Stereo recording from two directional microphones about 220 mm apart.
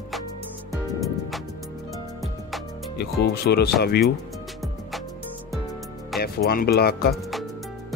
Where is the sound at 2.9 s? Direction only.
50° left (ahead or behind).